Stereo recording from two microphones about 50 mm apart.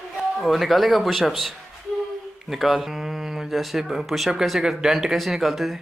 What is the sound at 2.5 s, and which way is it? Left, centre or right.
Speech, centre.